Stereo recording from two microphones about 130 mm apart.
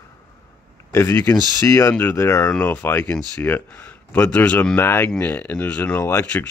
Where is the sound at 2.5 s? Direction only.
10° left (ahead or behind).